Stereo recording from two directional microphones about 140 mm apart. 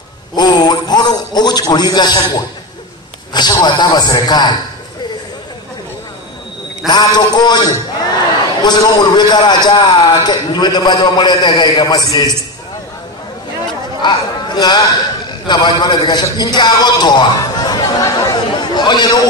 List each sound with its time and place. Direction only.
0.4 s a man's voice: 30° left (ahead or behind)
3.6 s a man's voice: 30° left (ahead or behind)
6.9 s a man's voice: 30° left (ahead or behind)
14.0 s a man's voice: 30° left (ahead or behind)